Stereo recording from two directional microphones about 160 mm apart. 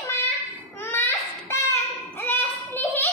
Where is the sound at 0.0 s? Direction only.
15° left (ahead or behind).